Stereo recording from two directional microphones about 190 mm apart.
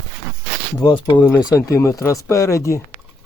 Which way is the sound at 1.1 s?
10° left (ahead or behind).